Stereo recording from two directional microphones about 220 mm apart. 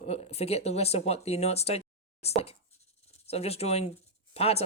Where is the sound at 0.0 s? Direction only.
30° left (ahead or behind).